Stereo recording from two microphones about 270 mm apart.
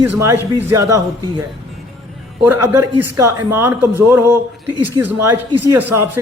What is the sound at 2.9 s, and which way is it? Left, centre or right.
Speech, centre.